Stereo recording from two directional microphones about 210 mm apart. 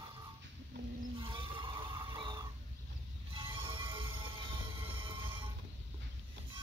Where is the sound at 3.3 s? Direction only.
25° right (ahead or behind).